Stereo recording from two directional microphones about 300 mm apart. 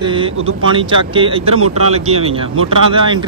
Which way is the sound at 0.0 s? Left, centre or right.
Centre.